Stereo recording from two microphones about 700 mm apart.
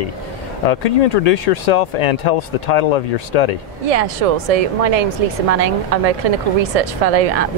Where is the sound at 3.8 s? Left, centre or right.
Right.